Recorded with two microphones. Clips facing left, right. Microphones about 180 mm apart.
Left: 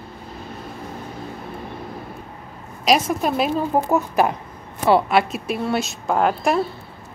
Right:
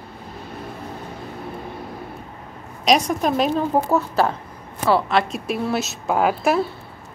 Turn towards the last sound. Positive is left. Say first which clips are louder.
# even
turn(degrees=-5)  # may be behind; listen again after turning